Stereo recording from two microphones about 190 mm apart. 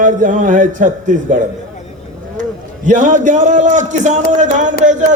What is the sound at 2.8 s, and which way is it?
A man's voice, 40° right (ahead or behind).